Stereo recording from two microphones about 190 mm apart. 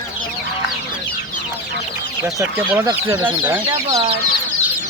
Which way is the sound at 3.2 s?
5° right (ahead or behind).